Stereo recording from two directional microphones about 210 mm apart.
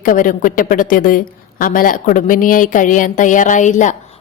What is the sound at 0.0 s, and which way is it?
A woman's voice, 40° left (ahead or behind).